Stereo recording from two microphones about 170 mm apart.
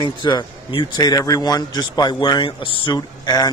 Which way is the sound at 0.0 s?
25° left (ahead or behind).